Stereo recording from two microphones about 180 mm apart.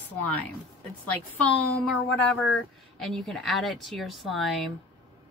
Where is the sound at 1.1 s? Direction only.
10° left (ahead or behind).